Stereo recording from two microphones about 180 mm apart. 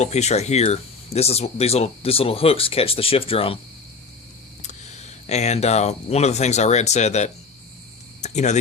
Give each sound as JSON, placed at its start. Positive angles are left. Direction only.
{"t": 0.0, "sound": "speech", "side_deg": 40}
{"t": 4.6, "sound": "speech", "side_deg": 40}
{"t": 8.2, "sound": "a sound", "side_deg": 40}